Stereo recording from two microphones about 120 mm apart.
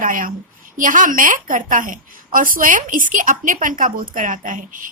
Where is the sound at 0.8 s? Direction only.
90° right.